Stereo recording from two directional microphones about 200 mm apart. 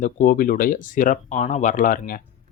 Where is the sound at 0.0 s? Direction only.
40° left (ahead or behind).